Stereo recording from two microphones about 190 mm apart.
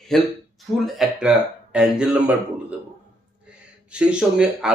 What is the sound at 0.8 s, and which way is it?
A man's voice, centre (ahead or behind).